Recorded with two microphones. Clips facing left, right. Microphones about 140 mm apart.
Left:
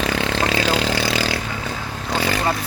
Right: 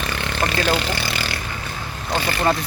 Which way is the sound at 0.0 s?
90° left.